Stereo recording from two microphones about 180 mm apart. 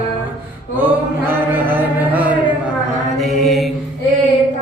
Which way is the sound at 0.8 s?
10° right (ahead or behind).